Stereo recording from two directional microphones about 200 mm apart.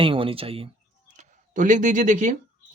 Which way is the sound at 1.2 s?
40° right (ahead or behind).